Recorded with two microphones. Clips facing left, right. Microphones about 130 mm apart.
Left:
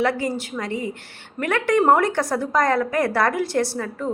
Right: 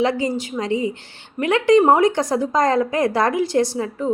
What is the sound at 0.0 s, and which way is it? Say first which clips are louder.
A woman's voice: right 2 dB; 20° right (ahead or behind).